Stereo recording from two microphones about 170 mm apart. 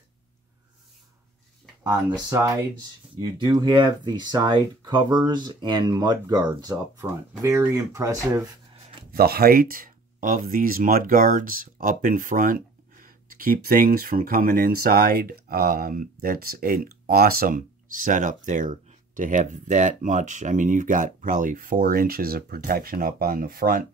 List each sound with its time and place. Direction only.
2.2 s speech: 20° right (ahead or behind)
9.1 s speech: 65° right (ahead or behind)